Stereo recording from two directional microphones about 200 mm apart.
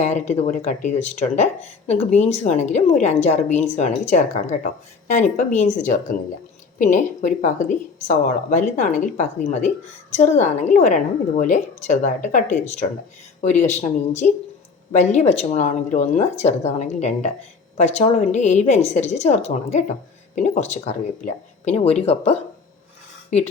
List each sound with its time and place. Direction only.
0.3 s a woman's voice: 35° left (ahead or behind)